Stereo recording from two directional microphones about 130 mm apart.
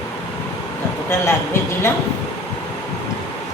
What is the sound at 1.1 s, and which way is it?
Speech, 20° left (ahead or behind).